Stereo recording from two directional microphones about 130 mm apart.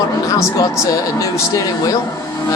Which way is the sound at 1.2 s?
25° left (ahead or behind).